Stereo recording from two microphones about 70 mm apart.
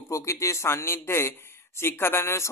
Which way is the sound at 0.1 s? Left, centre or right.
Left.